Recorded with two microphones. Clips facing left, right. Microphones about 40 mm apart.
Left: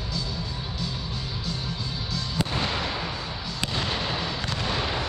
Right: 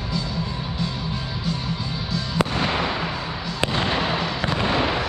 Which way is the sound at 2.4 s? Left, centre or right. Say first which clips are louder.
Right 6 dB; right.